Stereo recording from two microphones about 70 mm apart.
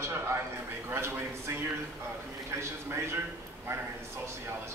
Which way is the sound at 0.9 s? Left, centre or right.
Right.